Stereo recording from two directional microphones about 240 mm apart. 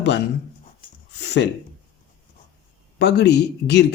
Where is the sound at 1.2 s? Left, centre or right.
Left.